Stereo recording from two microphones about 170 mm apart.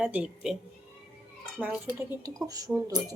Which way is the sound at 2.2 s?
20° right (ahead or behind).